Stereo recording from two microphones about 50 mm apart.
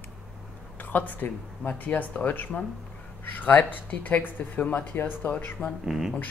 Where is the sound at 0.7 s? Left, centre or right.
Left.